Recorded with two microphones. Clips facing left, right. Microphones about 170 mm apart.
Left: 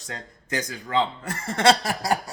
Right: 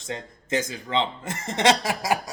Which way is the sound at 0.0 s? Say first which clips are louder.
Right 4 dB; 25° right (ahead or behind).